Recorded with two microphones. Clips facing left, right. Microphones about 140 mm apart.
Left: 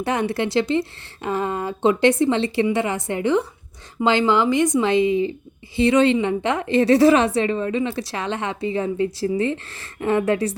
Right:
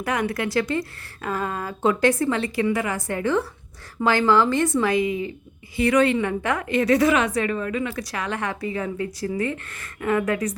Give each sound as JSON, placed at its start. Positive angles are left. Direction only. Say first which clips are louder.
{"t": 0.0, "sound": "a woman's voice", "louder": "left 3 dB", "side_deg": 30}